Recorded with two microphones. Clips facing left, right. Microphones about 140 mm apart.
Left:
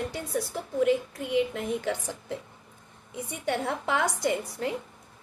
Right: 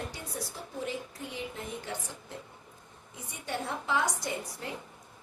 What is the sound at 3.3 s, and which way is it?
A woman's voice, 70° left (ahead or behind).